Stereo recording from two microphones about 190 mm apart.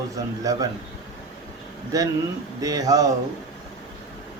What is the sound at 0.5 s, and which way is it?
Speech, 20° right (ahead or behind).